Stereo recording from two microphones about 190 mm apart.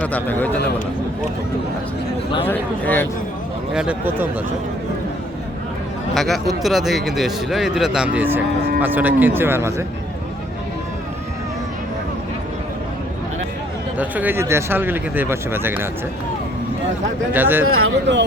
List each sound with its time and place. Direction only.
0.0 s speech: 10° left (ahead or behind)
2.5 s speech: 10° left (ahead or behind)
3.8 s speech: 10° right (ahead or behind)
6.1 s speech: centre (ahead or behind)
14.0 s speech: 10° right (ahead or behind)
17.3 s speech: 10° right (ahead or behind)
17.6 s speech: 80° right